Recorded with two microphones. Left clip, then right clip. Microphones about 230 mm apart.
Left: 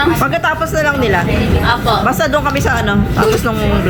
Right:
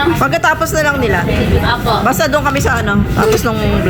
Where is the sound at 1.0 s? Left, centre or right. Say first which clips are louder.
Left 1 dB; centre.